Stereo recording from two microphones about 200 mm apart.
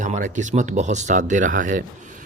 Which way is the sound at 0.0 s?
35° right (ahead or behind).